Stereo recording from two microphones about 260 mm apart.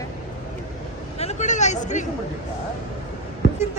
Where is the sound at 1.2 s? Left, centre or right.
Left.